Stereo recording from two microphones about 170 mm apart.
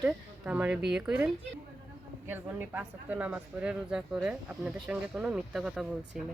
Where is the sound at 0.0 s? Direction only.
10° right (ahead or behind).